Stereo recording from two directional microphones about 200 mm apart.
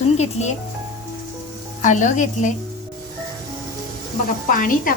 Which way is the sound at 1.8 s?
40° left (ahead or behind).